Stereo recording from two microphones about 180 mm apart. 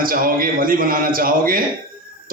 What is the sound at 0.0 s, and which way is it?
A man's voice, 55° right (ahead or behind).